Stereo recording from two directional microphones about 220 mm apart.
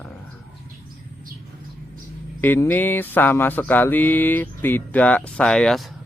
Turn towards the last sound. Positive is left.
turn(degrees=5)  # may be behind; listen again after turning